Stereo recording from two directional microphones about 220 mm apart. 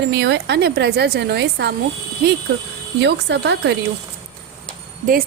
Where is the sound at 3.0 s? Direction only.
55° right (ahead or behind).